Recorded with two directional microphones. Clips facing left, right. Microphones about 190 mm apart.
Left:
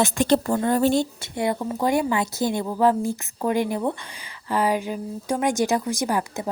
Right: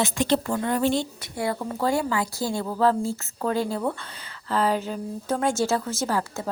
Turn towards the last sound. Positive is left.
turn(degrees=15)  # may be behind; listen again after turning